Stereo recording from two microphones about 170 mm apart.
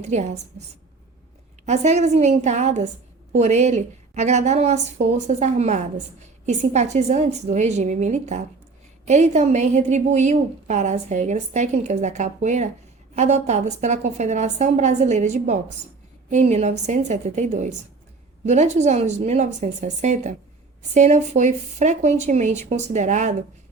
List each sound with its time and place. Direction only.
0.0 s a woman's voice: 45° right (ahead or behind)
1.6 s a woman's voice: 40° right (ahead or behind)